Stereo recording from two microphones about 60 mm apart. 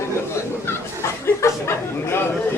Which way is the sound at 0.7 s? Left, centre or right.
Left.